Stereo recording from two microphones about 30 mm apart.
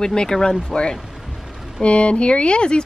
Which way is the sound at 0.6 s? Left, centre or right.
Left.